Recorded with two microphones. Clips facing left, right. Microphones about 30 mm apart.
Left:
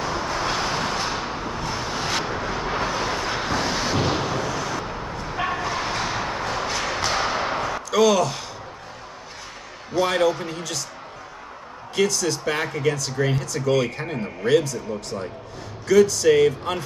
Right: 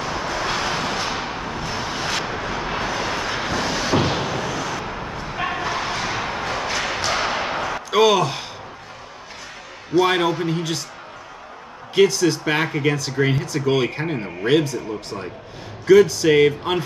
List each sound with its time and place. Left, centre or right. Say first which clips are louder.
0.0 s vehicle: right 1 dB; centre
3.5 s a sound: right 1 dB; centre
3.9 s vehicle: right 2 dB; right
4.8 s dog: right 1 dB; right
6.1 s a sound: right 1 dB; right
9.9 s speech: right 3 dB; right
11.9 s speech: right 6 dB; right